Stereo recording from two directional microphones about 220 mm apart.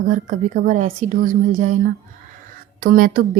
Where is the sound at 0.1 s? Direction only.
35° right (ahead or behind).